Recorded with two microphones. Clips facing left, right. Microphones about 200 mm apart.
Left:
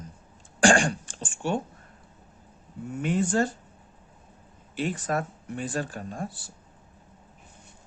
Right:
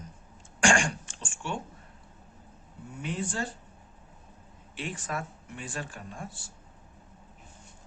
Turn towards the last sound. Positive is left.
turn(degrees=35)  # may be behind; listen again after turning